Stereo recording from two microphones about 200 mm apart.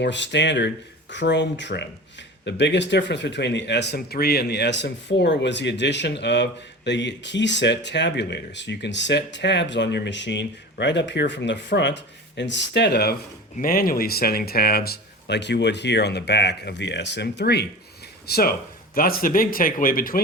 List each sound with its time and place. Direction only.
0.0 s speech: 60° left (ahead or behind); by 20.1 s 45° left (ahead or behind)